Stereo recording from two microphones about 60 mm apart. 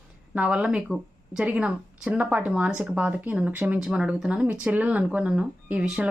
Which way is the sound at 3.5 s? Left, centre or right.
Right.